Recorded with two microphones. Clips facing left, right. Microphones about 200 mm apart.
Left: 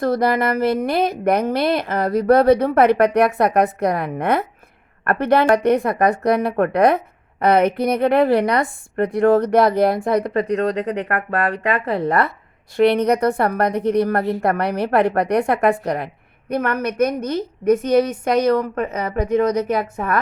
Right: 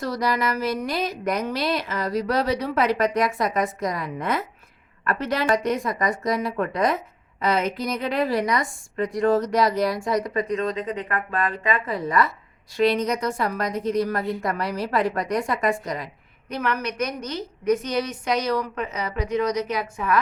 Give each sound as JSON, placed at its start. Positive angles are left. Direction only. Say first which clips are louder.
{"t": 0.0, "sound": "a woman's voice", "louder": "left 7 dB", "side_deg": 55}